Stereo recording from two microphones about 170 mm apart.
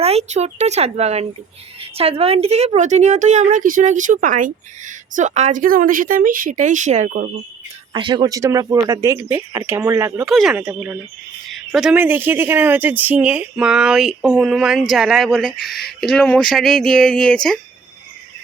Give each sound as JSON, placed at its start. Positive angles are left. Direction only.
{"t": 0.0, "sound": "a woman's voice", "side_deg": -40}
{"t": 7.9, "sound": "speech", "side_deg": -25}
{"t": 10.2, "sound": "speech", "side_deg": 0}